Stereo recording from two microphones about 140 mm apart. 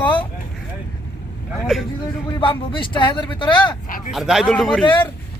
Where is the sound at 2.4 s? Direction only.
35° left (ahead or behind).